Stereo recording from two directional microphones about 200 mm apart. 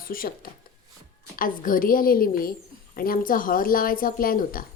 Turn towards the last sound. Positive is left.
turn(degrees=45)  # may be behind; listen again after turning